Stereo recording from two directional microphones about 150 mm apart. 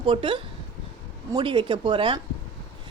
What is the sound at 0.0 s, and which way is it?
A woman's voice, 30° right (ahead or behind).